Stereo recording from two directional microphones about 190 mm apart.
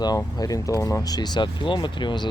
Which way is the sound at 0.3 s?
20° left (ahead or behind).